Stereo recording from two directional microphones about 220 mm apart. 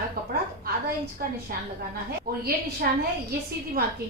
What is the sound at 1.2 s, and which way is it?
A woman's voice, 40° right (ahead or behind).